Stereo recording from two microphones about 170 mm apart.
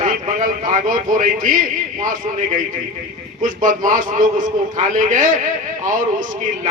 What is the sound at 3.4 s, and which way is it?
A man's voice, 50° right (ahead or behind).